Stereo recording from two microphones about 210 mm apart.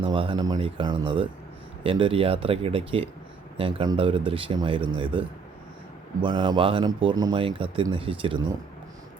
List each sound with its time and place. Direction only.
0.0 s speech: 25° right (ahead or behind)
6.2 s speech: 20° right (ahead or behind)